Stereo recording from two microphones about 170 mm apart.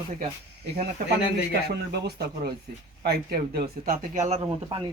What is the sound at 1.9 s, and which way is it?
Speech, 70° right (ahead or behind).